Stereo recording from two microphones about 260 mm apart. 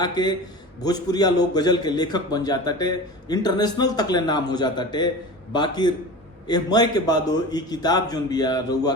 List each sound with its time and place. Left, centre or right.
0.0 s a man's voice: centre